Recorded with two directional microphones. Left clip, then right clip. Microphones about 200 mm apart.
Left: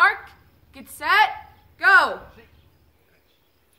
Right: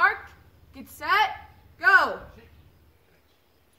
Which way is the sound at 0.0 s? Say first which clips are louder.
Left 4 dB; 20° left (ahead or behind).